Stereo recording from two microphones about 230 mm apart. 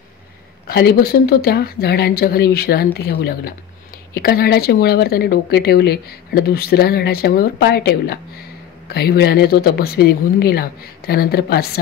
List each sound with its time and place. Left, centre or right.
0.7 s speech: left